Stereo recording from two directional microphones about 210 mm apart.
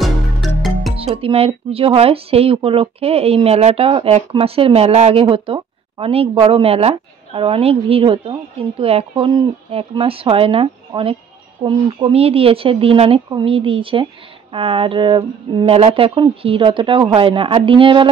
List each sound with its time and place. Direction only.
0.0 s music: centre (ahead or behind)
0.9 s speech: 25° right (ahead or behind)